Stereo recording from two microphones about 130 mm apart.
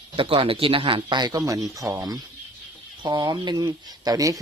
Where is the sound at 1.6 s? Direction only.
25° right (ahead or behind).